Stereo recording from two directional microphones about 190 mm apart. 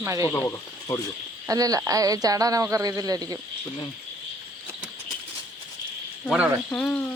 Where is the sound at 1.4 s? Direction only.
20° right (ahead or behind).